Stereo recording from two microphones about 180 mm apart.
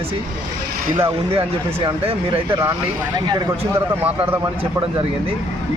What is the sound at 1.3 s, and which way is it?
A man's voice, 30° right (ahead or behind).